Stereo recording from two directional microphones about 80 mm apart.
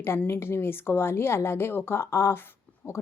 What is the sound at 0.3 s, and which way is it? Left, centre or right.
Speech, left.